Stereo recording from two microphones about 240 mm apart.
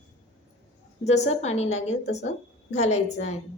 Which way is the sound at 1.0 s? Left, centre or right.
Left.